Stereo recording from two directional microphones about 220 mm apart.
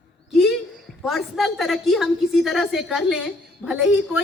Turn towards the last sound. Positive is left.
turn(degrees=-5)  # may be behind; listen again after turning